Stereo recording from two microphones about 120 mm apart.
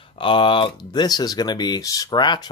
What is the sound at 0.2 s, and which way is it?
Speech, 45° left (ahead or behind).